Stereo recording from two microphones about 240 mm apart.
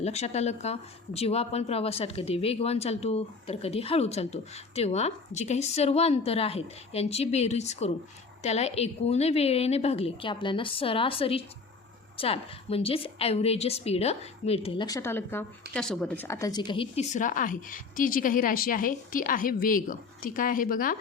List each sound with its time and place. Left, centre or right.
0.0 s a woman's voice: left